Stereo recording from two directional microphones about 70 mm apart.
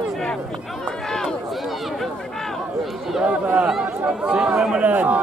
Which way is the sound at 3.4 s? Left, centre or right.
Centre.